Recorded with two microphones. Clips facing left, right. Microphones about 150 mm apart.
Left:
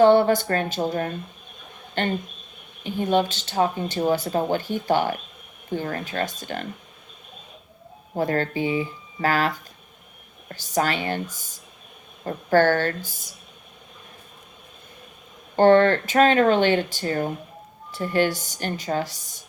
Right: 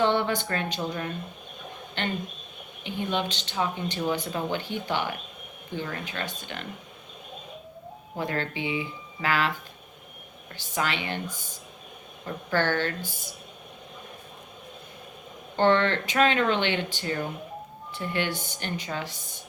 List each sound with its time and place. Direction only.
0.0 s speech: 40° left (ahead or behind)
8.1 s speech: 40° left (ahead or behind)
15.5 s speech: 45° left (ahead or behind)